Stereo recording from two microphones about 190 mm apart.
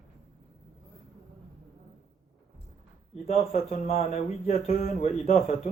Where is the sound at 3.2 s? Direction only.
35° left (ahead or behind).